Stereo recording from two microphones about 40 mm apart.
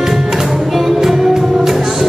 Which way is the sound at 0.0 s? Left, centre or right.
Centre.